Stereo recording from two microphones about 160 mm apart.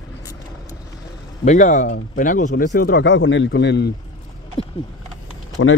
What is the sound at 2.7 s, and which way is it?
Speech, 80° left.